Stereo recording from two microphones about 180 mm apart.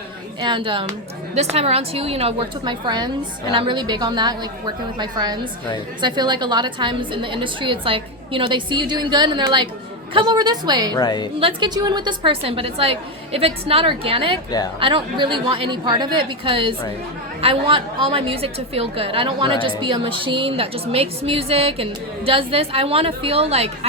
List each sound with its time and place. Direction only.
0.4 s a woman's voice: 25° right (ahead or behind)
10.9 s a woman's voice: 20° left (ahead or behind)
11.3 s a woman's voice: 30° right (ahead or behind)